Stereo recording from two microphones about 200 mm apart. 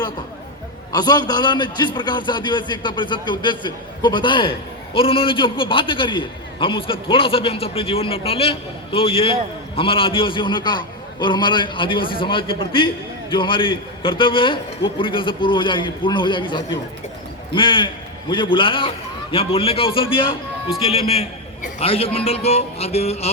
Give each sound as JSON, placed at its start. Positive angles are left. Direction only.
{"t": 0.9, "sound": "a man's voice", "side_deg": 20}